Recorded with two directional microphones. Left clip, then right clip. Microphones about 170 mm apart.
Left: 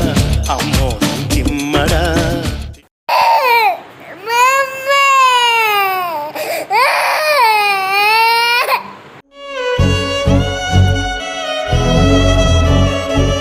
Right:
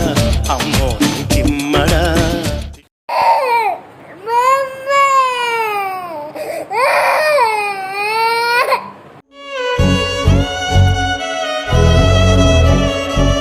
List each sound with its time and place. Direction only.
0.0 s music: centre (ahead or behind)
3.1 s crying: 10° right (ahead or behind)
4.3 s a sound: 20° right (ahead or behind)
6.3 s baby cry: 15° right (ahead or behind)
9.5 s music: centre (ahead or behind)